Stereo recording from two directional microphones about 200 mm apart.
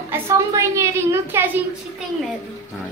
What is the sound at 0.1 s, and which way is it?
A woman's voice, 15° right (ahead or behind).